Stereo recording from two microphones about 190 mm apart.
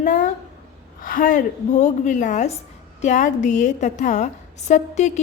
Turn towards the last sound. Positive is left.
turn(degrees=40)  # may be behind; listen again after turning